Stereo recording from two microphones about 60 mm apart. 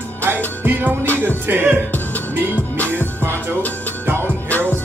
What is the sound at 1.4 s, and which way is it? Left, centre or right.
Music, right.